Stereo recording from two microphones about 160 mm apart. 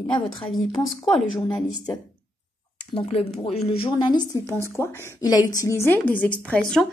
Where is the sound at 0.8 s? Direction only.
Centre (ahead or behind).